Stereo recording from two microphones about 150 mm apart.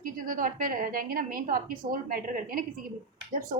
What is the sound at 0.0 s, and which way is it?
A woman's voice, 65° right (ahead or behind).